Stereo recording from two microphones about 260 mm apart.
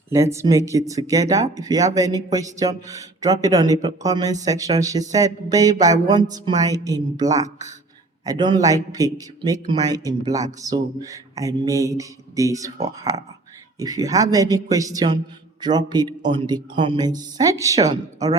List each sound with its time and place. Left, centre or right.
0.1 s a man's voice: centre